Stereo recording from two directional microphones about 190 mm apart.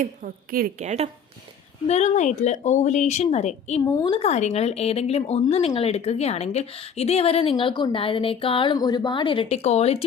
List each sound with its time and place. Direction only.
0.0 s a woman's voice: 45° right (ahead or behind)
1.9 s a woman's voice: 35° left (ahead or behind)
3.8 s a woman's voice: 20° left (ahead or behind)